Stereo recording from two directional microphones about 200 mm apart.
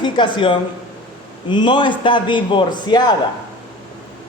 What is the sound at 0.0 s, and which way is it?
Speech, 25° left (ahead or behind).